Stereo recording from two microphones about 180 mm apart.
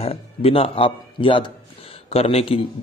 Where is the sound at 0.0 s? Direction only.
30° left (ahead or behind).